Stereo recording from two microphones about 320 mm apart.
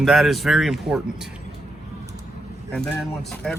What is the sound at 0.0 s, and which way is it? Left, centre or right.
Speech, centre.